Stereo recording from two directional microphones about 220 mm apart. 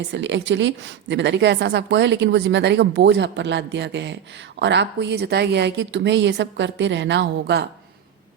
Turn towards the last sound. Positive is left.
turn(degrees=-50)  # may be behind; listen again after turning